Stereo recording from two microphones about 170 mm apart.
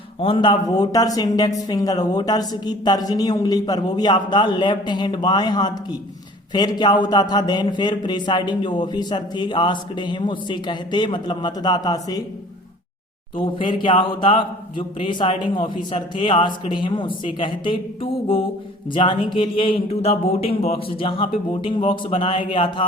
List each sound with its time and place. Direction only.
0.2 s speech: 30° left (ahead or behind)
13.3 s speech: 30° left (ahead or behind)